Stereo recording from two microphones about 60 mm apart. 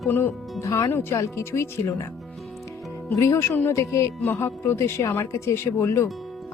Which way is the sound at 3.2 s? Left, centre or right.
Left.